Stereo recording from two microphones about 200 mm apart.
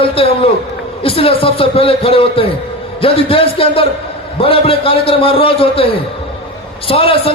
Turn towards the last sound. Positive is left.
turn(degrees=25)  # may be behind; listen again after turning